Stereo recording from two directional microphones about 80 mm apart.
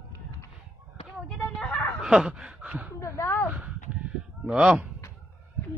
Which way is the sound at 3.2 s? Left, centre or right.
Left.